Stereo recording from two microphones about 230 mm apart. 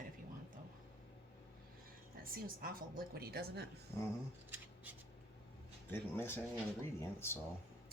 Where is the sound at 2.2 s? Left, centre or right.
Right.